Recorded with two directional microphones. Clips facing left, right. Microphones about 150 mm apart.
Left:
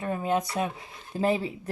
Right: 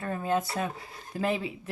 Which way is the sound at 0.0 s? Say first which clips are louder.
Left 2 dB; 15° left (ahead or behind).